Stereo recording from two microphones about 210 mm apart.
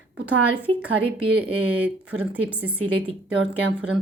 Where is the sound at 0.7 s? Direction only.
25° right (ahead or behind).